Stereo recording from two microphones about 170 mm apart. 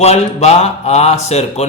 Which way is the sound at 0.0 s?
40° left (ahead or behind).